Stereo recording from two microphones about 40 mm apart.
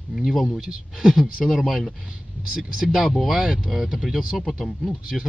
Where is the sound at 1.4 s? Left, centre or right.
Centre.